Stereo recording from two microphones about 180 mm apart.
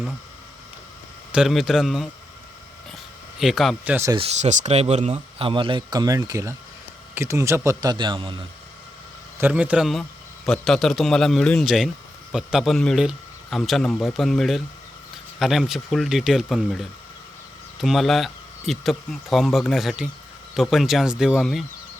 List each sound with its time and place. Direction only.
1.3 s a man's voice: 5° right (ahead or behind)
2.9 s a sound: centre (ahead or behind)
4.4 s speech: 40° right (ahead or behind)
9.4 s a man's voice: 5° right (ahead or behind)